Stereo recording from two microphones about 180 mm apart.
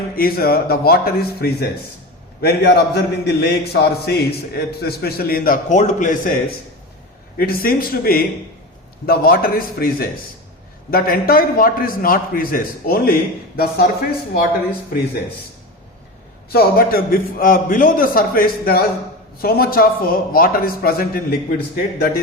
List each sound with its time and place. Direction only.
0.2 s a man's voice: 55° left (ahead or behind)
7.3 s a man's voice: 55° left (ahead or behind)
16.5 s a man's voice: 55° left (ahead or behind)